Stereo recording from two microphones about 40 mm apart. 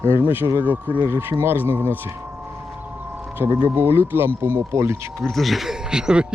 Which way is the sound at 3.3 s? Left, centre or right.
Right.